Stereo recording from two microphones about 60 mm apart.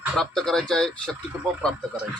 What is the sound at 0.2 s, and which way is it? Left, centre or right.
Speech, centre.